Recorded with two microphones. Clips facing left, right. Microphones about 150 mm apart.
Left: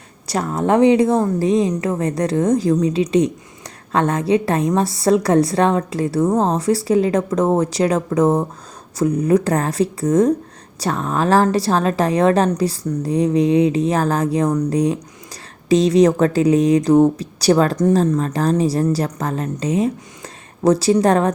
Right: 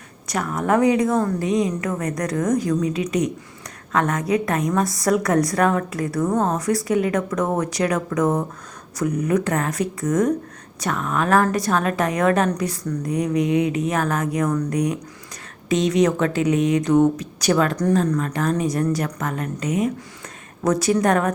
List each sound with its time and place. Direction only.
0.3 s a woman's voice: 30° left (ahead or behind)